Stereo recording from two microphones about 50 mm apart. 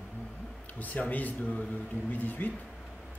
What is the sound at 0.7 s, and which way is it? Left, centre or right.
A man's voice, left.